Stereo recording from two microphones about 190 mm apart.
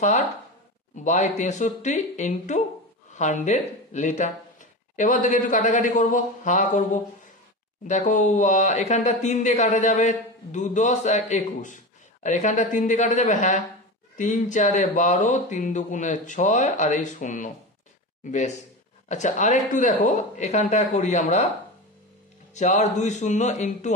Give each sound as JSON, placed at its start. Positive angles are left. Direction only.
{"t": 0.9, "sound": "speech", "side_deg": 40}
{"t": 22.5, "sound": "speech", "side_deg": 35}